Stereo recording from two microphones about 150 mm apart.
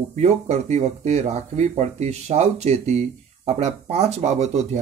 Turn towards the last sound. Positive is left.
turn(degrees=-50)  # may be behind; listen again after turning